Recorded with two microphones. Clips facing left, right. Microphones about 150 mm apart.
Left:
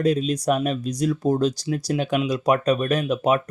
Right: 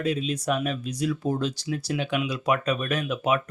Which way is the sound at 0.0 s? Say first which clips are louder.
Left 6 dB; 40° left (ahead or behind).